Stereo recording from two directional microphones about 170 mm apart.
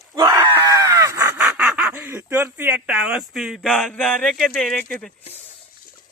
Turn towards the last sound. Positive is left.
turn(degrees=45)  # may be behind; listen again after turning